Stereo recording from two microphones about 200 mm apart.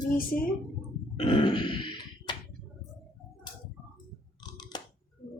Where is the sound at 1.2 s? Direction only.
25° left (ahead or behind).